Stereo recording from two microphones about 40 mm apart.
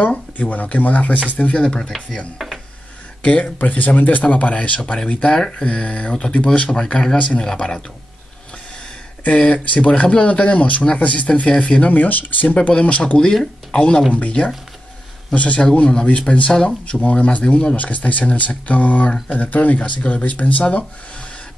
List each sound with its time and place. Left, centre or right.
0.4 s speech: left
1.6 s speech: left
2.3 s a sound: centre
3.2 s speech: left
5.3 s speech: centre
5.7 s speech: left
6.7 s speech: left
9.4 s speech: left
11.4 s speech: left
11.9 s speech: left
12.5 s speech: left
13.2 s speech: centre
17.0 s speech: left